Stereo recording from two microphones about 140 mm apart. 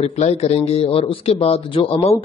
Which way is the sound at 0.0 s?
45° left (ahead or behind).